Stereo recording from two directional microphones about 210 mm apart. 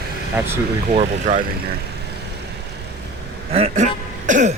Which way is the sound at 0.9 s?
35° right (ahead or behind).